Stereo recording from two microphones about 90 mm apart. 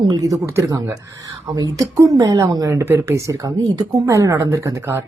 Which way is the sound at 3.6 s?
50° right (ahead or behind).